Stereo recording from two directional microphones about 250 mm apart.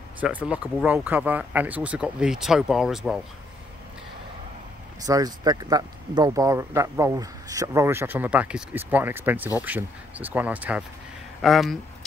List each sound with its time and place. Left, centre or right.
0.2 s speech: centre
5.0 s speech: centre